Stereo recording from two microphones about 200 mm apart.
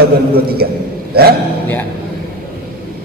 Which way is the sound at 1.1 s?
50° right (ahead or behind).